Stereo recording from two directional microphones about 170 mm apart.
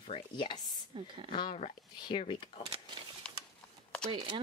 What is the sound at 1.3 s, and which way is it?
Speech, 30° left (ahead or behind).